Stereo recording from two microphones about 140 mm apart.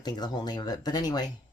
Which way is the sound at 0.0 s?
30° left (ahead or behind).